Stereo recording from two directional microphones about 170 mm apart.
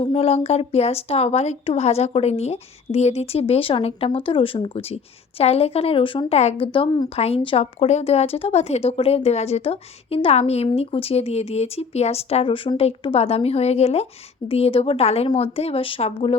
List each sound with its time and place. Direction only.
0.0 s speech: 35° left (ahead or behind)